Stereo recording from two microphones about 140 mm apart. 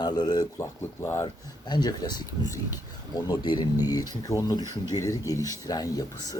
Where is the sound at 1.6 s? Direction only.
30° left (ahead or behind).